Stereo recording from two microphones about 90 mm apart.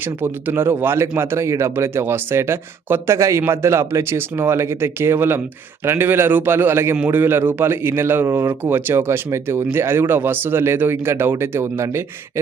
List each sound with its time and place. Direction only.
0.0 s speech: 20° right (ahead or behind)